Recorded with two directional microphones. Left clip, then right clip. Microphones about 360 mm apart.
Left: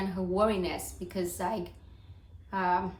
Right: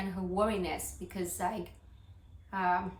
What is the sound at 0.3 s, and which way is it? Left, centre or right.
A woman's voice, centre.